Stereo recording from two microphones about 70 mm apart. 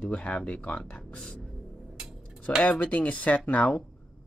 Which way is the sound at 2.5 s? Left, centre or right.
Left.